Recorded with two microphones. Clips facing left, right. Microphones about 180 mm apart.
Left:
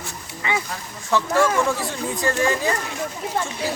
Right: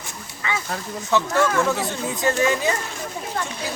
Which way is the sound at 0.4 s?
20° left (ahead or behind).